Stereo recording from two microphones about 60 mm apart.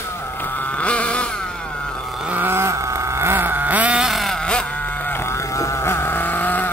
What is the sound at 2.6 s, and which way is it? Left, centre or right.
Vehicle, right.